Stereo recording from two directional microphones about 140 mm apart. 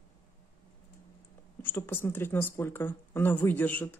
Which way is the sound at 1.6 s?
15° left (ahead or behind).